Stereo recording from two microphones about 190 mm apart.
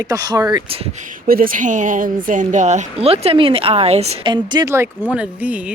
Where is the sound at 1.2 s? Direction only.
50° right (ahead or behind); by 4.3 s 35° right (ahead or behind).